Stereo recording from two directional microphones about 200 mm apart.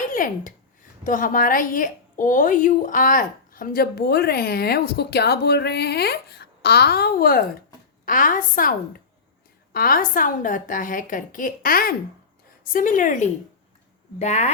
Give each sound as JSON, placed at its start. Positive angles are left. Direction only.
{"t": 0.1, "sound": "a woman's voice", "side_deg": 45}